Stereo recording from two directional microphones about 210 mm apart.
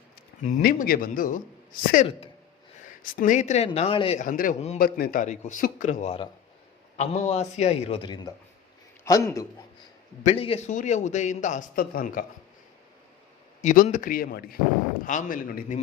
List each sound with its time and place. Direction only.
0.4 s a man's voice: 40° left (ahead or behind)
3.0 s speech: 40° left (ahead or behind)
4.2 s a man's voice: 40° left (ahead or behind)
4.8 s a man's voice: 45° left (ahead or behind); by 9.5 s 15° left (ahead or behind)
10.2 s a man's voice: 30° left (ahead or behind)
13.6 s a man's voice: 35° left (ahead or behind)